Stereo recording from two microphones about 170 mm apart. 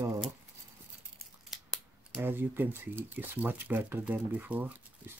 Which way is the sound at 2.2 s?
10° right (ahead or behind).